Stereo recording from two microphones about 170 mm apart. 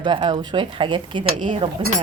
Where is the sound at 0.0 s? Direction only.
30° right (ahead or behind).